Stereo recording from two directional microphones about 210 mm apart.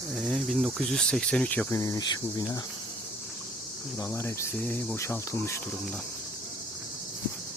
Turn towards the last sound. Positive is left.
turn(degrees=15)  # may be behind; listen again after turning